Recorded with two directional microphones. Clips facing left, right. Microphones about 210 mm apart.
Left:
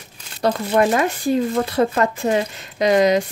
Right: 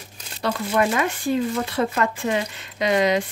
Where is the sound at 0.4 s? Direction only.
40° left (ahead or behind).